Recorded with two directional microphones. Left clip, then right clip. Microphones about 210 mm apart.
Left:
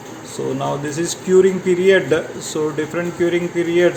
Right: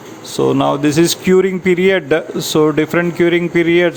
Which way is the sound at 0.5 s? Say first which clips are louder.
Right 8 dB; 45° right (ahead or behind).